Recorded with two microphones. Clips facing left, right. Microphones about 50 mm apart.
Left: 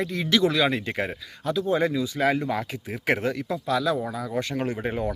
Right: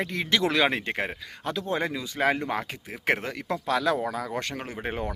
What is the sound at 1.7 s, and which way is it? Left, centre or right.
Speech, right.